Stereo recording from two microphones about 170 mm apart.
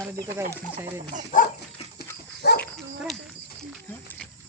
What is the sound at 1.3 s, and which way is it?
Dog, 50° left (ahead or behind).